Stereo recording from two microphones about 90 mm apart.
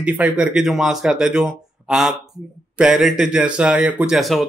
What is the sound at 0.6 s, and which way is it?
A man's voice, 5° right (ahead or behind).